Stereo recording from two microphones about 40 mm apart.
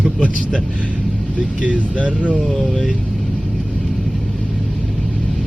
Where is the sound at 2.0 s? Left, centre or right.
Right.